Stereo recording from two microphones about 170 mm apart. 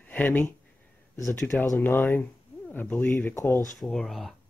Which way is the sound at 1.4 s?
15° left (ahead or behind).